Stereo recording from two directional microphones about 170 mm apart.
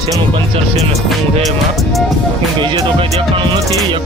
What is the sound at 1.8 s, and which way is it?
Speech, centre (ahead or behind).